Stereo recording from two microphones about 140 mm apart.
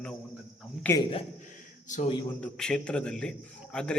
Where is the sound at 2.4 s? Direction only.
5° left (ahead or behind).